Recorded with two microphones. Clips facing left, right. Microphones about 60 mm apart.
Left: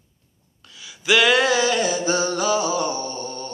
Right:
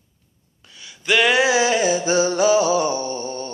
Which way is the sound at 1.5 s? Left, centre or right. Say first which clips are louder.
Right 2 dB; centre.